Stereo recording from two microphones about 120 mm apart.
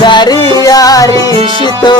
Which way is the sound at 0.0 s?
40° left (ahead or behind).